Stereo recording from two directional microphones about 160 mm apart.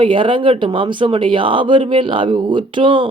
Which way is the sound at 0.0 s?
30° right (ahead or behind).